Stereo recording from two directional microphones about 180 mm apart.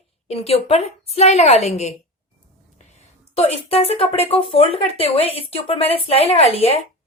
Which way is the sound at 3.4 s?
35° left (ahead or behind).